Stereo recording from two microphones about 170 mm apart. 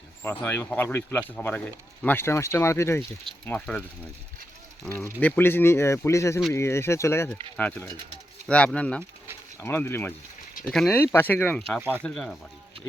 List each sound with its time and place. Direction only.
0.2 s speech: 10° left (ahead or behind)
4.9 s speech: 15° left (ahead or behind)
11.8 s speech: 10° right (ahead or behind)
12.0 s speech: centre (ahead or behind)